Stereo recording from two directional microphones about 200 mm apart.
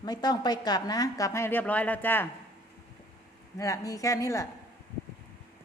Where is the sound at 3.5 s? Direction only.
15° left (ahead or behind).